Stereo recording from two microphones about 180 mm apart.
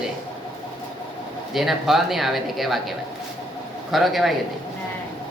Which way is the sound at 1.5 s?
Centre (ahead or behind).